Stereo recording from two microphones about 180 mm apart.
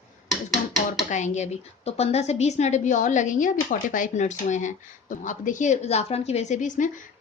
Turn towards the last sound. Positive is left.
turn(degrees=45)  # may be behind; listen again after turning